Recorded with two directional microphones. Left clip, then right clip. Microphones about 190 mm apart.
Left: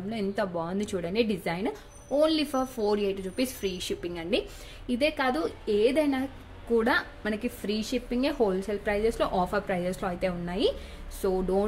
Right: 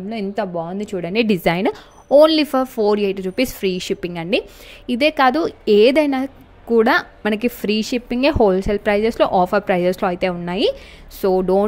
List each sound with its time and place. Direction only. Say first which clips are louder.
0.1 s a woman's voice: right 7 dB; 30° right (ahead or behind)
1.0 s a woman's voice: right 12 dB; 40° right (ahead or behind)